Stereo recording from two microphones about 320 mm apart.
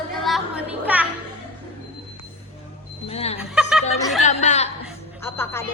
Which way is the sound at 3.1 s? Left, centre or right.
Centre.